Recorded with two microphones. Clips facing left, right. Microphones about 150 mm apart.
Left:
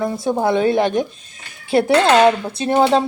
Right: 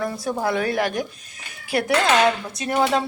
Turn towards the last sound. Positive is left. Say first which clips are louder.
# left 6 dB
turn(degrees=30)  # may be behind; listen again after turning